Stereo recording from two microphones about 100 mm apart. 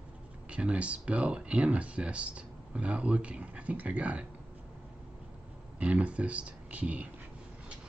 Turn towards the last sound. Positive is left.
turn(degrees=-15)  # may be behind; listen again after turning